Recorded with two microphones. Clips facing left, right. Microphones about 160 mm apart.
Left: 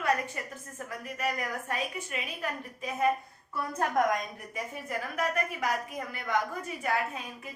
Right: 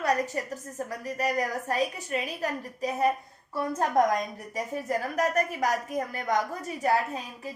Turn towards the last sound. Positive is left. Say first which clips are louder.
# right 5 dB
turn(degrees=-35)  # may be behind; listen again after turning